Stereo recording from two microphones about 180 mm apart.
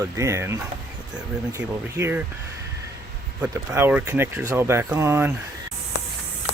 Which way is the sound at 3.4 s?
15° right (ahead or behind).